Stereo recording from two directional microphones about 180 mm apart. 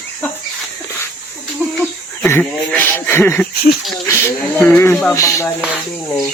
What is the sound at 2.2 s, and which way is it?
Speech, 10° left (ahead or behind).